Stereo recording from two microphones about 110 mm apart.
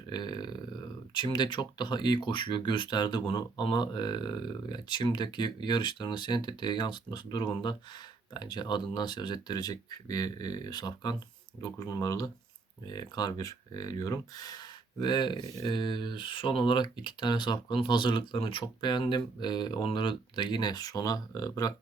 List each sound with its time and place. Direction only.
0.1 s burping: 40° left (ahead or behind)
1.1 s speech: 45° left (ahead or behind)